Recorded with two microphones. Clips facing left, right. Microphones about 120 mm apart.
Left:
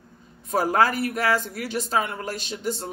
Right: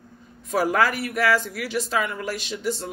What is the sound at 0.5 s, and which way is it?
Speech, 40° left (ahead or behind).